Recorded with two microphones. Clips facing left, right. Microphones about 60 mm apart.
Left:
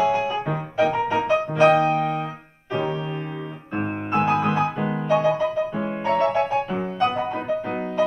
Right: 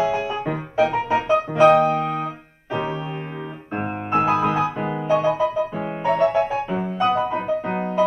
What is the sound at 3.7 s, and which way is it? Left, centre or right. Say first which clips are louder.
Music: right 1 dB; centre.